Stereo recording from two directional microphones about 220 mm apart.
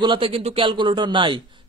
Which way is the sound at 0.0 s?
25° right (ahead or behind).